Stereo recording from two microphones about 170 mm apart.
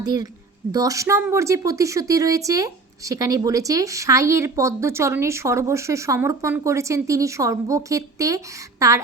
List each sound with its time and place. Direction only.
0.0 s a woman's voice: 25° right (ahead or behind)